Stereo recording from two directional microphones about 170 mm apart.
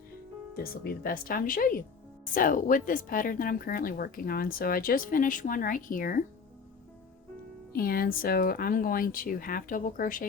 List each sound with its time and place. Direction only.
0.5 s speech: 60° left (ahead or behind)
7.7 s speech: 60° left (ahead or behind)